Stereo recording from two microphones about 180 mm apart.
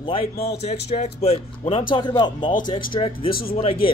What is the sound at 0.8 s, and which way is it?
Speech, 35° left (ahead or behind).